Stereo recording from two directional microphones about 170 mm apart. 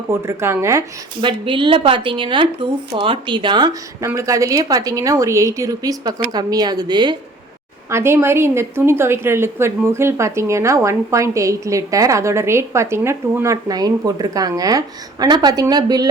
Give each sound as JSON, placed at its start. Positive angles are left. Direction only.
{"t": 0.1, "sound": "a woman's voice", "side_deg": -15}
{"t": 1.2, "sound": "speech", "side_deg": -30}
{"t": 7.9, "sound": "a woman's voice", "side_deg": -15}